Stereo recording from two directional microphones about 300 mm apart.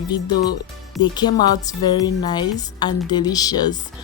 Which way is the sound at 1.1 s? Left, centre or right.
Centre.